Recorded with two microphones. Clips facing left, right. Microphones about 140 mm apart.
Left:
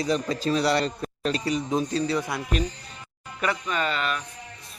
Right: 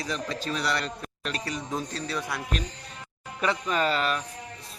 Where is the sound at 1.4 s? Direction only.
20° left (ahead or behind).